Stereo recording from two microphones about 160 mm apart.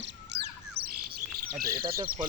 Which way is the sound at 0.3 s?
90° right.